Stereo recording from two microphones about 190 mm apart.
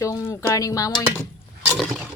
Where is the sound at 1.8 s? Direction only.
Centre (ahead or behind).